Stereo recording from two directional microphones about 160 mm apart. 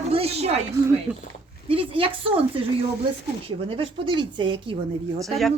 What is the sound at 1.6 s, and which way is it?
Speech, 35° right (ahead or behind).